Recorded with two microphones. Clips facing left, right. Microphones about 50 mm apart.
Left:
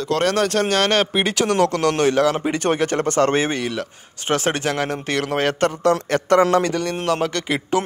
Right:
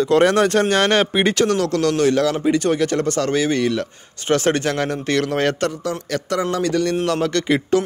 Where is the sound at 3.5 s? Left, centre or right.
Centre.